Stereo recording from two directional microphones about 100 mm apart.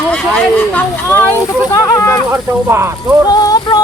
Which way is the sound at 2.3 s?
25° right (ahead or behind).